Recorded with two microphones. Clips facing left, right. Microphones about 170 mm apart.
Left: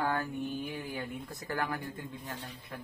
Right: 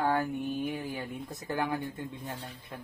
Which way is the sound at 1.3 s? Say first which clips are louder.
Right 4 dB; 20° right (ahead or behind).